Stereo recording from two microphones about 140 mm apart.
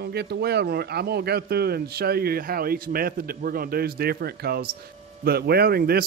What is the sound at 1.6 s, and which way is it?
A man's voice, 90° right.